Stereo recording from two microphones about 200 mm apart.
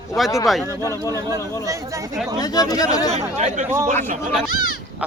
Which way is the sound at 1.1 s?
15° right (ahead or behind).